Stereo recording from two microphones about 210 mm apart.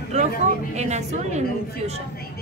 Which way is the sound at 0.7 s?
35° right (ahead or behind).